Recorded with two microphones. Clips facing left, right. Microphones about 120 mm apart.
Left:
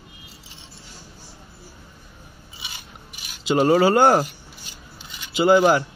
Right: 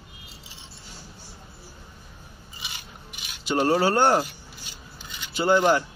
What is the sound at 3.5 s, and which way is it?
Speech, 90° left.